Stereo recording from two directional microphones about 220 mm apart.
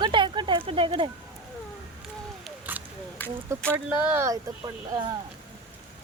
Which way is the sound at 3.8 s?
5° right (ahead or behind).